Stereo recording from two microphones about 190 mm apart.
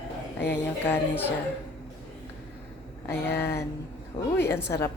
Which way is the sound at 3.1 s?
10° left (ahead or behind).